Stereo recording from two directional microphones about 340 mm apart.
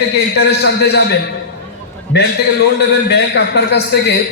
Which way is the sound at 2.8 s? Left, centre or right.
Left.